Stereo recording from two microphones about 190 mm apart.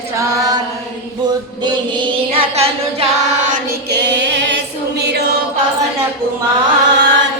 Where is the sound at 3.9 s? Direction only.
65° right (ahead or behind).